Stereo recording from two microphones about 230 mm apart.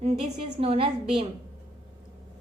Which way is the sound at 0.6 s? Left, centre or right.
Right.